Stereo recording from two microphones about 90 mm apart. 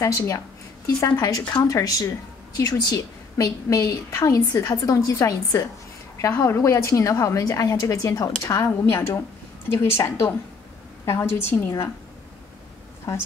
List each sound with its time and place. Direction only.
0.0 s a woman's voice: 40° left (ahead or behind)